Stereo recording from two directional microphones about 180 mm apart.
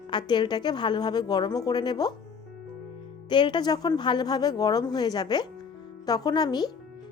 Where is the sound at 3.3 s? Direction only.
25° left (ahead or behind).